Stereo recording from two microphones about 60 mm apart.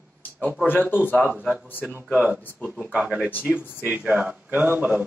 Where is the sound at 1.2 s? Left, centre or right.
Right.